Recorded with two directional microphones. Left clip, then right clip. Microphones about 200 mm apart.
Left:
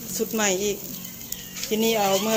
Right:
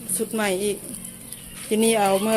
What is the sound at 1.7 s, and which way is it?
Speech, 25° right (ahead or behind).